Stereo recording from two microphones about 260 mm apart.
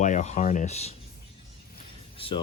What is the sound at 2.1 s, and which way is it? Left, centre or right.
Speech, left.